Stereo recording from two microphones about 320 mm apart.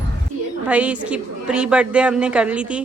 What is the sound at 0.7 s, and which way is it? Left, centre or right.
A woman's voice, centre.